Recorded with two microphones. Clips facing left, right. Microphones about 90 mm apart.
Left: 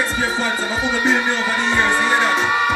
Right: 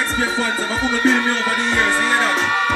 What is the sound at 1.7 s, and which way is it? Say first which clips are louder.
Music: left 2 dB; 10° left (ahead or behind).